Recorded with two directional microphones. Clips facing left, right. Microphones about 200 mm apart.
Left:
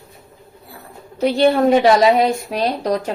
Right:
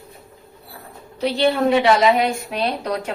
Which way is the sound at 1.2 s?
50° left (ahead or behind).